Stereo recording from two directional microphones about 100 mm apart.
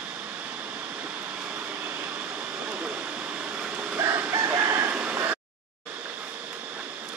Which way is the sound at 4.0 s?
25° right (ahead or behind).